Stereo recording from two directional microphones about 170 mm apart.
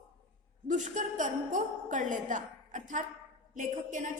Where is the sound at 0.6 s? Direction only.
45° right (ahead or behind).